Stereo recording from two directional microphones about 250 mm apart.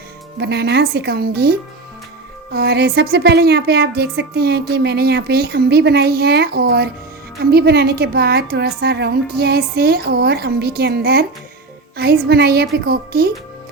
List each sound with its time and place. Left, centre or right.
0.3 s a woman's voice: right